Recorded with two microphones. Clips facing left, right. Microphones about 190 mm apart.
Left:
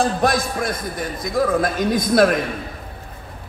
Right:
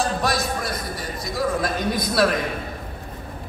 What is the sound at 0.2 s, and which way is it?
A man's voice, 50° left (ahead or behind).